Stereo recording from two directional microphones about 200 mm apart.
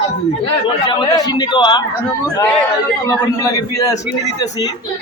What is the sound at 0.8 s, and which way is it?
Speech, 20° left (ahead or behind).